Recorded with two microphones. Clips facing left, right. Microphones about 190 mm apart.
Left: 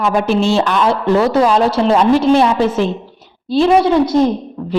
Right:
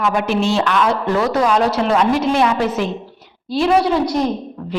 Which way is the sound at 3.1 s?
25° left (ahead or behind).